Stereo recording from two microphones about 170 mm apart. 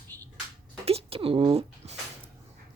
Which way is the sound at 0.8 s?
35° right (ahead or behind).